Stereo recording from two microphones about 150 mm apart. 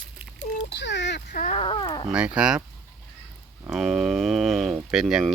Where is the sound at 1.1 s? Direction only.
60° left (ahead or behind).